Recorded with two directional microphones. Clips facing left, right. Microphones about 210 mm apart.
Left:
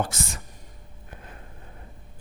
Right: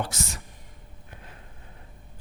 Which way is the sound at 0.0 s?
50° left (ahead or behind).